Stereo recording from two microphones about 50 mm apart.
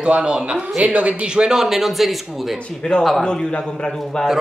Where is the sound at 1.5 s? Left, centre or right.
Centre.